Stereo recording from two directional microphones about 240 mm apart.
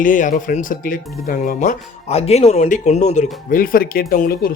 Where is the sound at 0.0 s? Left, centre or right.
Left.